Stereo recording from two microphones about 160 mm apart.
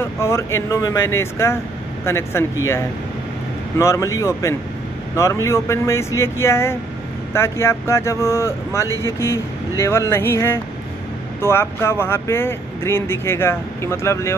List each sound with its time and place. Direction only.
0.0 s speech: 15° left (ahead or behind)
3.7 s speech: 20° left (ahead or behind)